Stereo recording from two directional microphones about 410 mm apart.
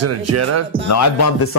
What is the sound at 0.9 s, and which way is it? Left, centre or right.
Speech, left.